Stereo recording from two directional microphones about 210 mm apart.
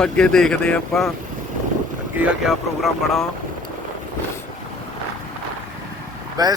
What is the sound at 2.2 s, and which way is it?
Speech, centre (ahead or behind).